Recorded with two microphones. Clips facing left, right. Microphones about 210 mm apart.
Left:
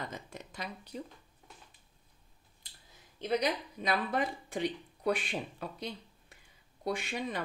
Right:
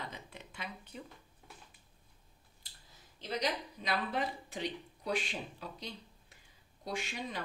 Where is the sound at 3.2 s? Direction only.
55° left (ahead or behind).